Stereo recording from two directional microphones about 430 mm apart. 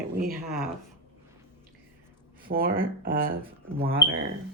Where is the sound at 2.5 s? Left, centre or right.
Centre.